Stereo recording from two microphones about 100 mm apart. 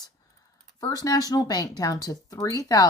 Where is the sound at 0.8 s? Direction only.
40° left (ahead or behind).